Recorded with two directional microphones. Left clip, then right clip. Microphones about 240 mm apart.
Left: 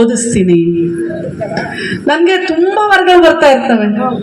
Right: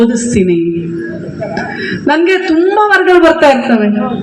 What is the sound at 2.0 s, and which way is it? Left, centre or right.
A woman's voice, left.